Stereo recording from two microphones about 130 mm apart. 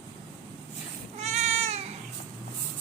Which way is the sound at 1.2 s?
60° right (ahead or behind).